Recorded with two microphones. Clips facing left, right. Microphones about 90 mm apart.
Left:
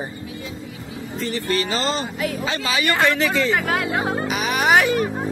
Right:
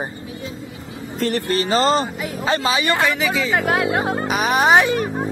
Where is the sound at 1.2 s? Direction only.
65° right (ahead or behind).